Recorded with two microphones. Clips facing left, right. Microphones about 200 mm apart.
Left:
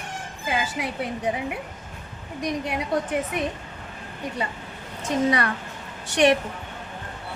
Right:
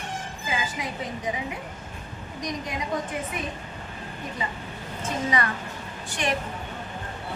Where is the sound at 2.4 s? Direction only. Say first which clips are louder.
Left 5 dB; 65° left (ahead or behind).